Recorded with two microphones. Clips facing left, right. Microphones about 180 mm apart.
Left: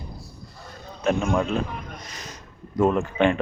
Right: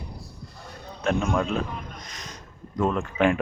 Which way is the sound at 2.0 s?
5° left (ahead or behind).